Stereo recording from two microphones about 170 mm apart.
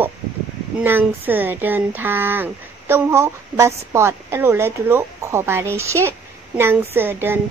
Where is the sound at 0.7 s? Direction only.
10° right (ahead or behind).